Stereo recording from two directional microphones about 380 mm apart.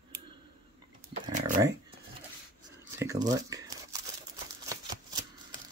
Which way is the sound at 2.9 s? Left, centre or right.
Centre.